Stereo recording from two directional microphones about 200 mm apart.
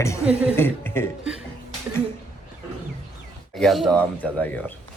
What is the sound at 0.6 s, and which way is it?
Speech, 10° left (ahead or behind).